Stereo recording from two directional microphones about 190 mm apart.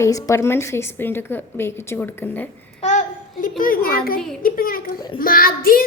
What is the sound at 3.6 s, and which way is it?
Speech, 50° left (ahead or behind).